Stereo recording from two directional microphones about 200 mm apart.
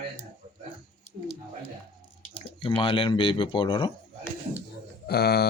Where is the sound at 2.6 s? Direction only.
25° left (ahead or behind).